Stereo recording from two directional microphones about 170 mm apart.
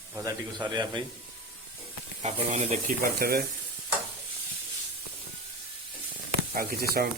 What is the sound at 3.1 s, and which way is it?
Speech, 65° right (ahead or behind).